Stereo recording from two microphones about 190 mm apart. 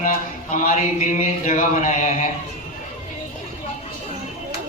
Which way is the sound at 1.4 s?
45° left (ahead or behind).